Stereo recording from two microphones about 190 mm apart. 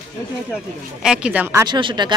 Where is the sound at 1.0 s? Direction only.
5° right (ahead or behind).